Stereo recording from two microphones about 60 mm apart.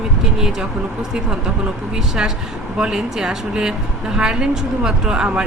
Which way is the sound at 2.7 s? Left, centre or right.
Centre.